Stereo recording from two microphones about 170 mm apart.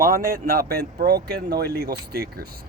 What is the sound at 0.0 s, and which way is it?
A man's voice, 60° right (ahead or behind).